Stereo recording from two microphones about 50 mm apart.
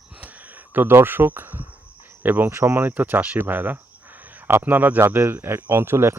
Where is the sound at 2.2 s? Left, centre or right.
Right.